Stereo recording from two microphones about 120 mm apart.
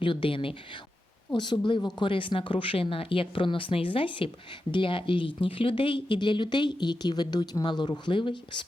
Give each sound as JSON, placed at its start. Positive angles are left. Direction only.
{"t": 0.0, "sound": "speech", "side_deg": 45}